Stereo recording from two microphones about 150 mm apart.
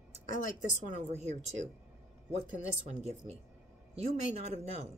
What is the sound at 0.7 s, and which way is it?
Speech, 55° right (ahead or behind).